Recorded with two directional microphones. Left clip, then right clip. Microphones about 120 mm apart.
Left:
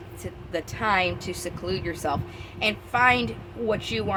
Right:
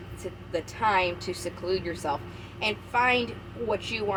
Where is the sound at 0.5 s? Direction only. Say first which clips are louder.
Left 1 dB; 55° left (ahead or behind).